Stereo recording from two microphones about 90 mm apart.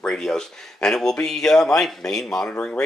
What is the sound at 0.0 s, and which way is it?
Speech, 5° left (ahead or behind).